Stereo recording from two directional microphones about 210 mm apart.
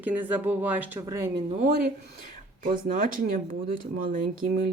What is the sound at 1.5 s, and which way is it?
Speech, 35° right (ahead or behind).